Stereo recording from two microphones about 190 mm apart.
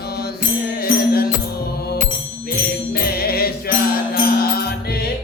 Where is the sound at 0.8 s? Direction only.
55° left (ahead or behind).